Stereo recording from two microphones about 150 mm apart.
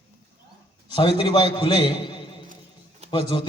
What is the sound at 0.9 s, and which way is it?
A man's voice, 30° left (ahead or behind).